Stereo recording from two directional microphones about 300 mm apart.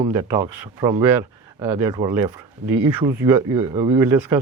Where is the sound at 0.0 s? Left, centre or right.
Centre.